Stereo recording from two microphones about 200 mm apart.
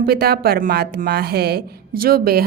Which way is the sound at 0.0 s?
50° right (ahead or behind).